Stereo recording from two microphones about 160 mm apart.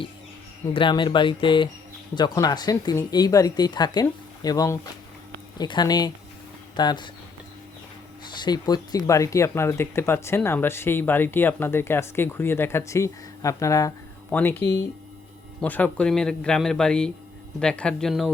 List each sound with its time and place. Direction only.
0.7 s speech: 30° left (ahead or behind)
8.3 s speech: 25° left (ahead or behind)
14.3 s speech: 10° left (ahead or behind)
15.6 s a man's voice: 10° left (ahead or behind)